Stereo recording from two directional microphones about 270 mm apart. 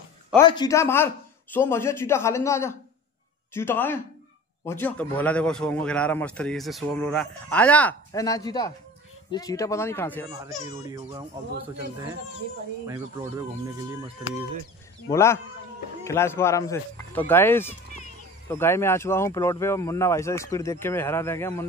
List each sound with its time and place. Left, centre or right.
0.4 s a man's voice: centre
10.4 s speech: centre
12.8 s speech: centre
15.0 s speech: centre